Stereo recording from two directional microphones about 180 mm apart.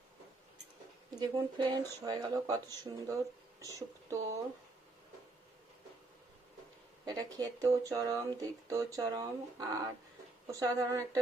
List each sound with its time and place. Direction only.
1.1 s speech: 20° right (ahead or behind)
7.0 s speech: 20° right (ahead or behind)